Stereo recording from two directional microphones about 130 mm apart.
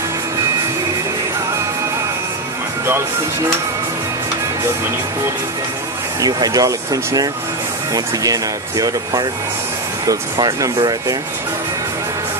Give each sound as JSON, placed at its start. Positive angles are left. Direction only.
{"t": 6.2, "sound": "speech", "side_deg": -30}